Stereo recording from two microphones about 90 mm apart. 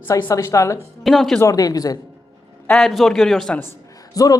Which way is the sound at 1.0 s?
Centre (ahead or behind).